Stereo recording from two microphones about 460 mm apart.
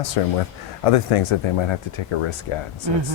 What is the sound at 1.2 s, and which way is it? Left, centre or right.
Speech, left.